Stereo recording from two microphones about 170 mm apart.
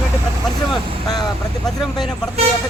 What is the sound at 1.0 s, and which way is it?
Speech, 25° left (ahead or behind).